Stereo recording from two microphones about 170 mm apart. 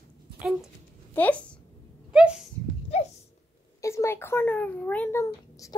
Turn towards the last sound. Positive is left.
turn(degrees=10)  # may be behind; listen again after turning